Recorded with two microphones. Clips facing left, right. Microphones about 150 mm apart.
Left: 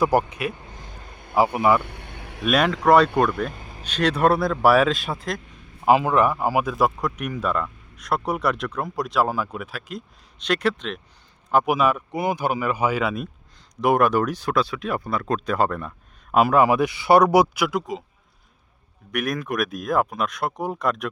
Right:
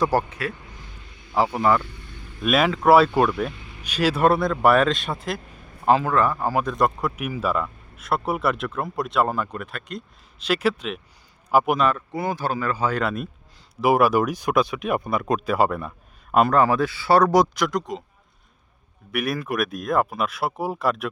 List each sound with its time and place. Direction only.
0.0 s speech: 15° left (ahead or behind)
0.6 s vehicle: 45° left (ahead or behind)
1.5 s speech: 10° left (ahead or behind)
1.8 s vehicle: 65° left (ahead or behind)
2.4 s speech: centre (ahead or behind)
3.5 s vehicle: 40° left (ahead or behind)
3.8 s speech: 5° right (ahead or behind)
5.8 s speech: 15° left (ahead or behind)
13.0 s speech: centre (ahead or behind)
16.3 s speech: 5° left (ahead or behind)
19.1 s speech: 5° right (ahead or behind)